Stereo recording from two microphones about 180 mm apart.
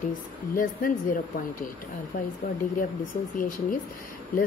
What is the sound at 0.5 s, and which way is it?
Speech, 50° left (ahead or behind).